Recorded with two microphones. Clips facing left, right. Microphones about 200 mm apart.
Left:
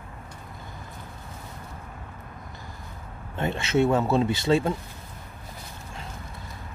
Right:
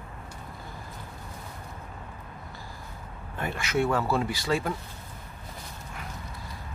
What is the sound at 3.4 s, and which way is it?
Speech, 25° left (ahead or behind).